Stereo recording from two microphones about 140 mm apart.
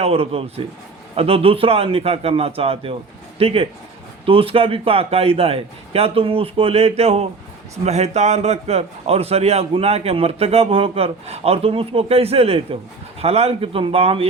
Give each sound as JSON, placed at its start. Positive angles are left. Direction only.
{"t": 0.0, "sound": "a man's voice", "side_deg": -45}